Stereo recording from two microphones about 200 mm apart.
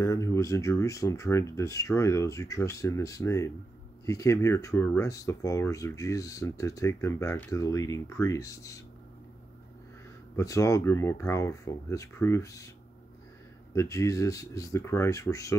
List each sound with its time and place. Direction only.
0.0 s speech: 15° left (ahead or behind)
10.3 s speech: 15° left (ahead or behind)
13.7 s speech: 15° left (ahead or behind)